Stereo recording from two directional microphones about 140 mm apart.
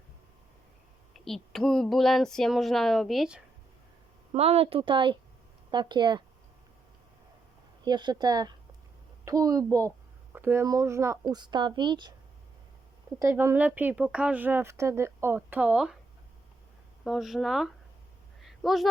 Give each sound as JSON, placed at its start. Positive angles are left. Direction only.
{"t": 1.1, "sound": "speech", "side_deg": 0}
{"t": 4.3, "sound": "a woman's voice", "side_deg": -45}
{"t": 7.9, "sound": "speech", "side_deg": -30}
{"t": 11.3, "sound": "a woman's voice", "side_deg": -30}
{"t": 13.1, "sound": "speech", "side_deg": -20}
{"t": 17.0, "sound": "speech", "side_deg": 0}
{"t": 18.4, "sound": "a sound", "side_deg": 0}